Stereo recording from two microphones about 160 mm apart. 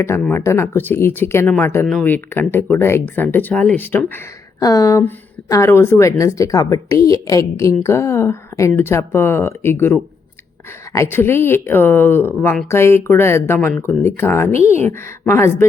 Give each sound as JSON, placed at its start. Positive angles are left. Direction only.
{"t": 0.3, "sound": "a woman's voice", "side_deg": 15}
{"t": 4.6, "sound": "a woman's voice", "side_deg": 25}
{"t": 14.5, "sound": "speech", "side_deg": -40}
{"t": 14.8, "sound": "a woman's voice", "side_deg": 15}